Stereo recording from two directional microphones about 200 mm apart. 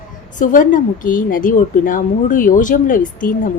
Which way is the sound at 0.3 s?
40° left (ahead or behind).